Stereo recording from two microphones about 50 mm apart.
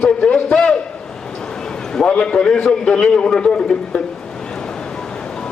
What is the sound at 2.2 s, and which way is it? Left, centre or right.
A man's voice, centre.